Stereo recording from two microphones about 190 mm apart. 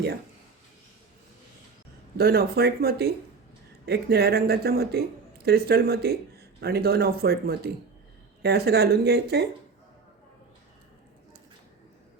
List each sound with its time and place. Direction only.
2.1 s speech: 55° right (ahead or behind)